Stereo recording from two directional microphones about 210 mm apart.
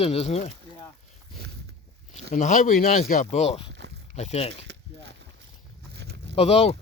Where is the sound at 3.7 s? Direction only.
55° right (ahead or behind).